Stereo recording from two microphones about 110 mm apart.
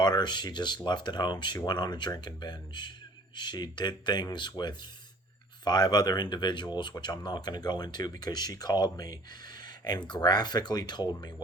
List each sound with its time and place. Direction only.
0.0 s speech: 40° left (ahead or behind)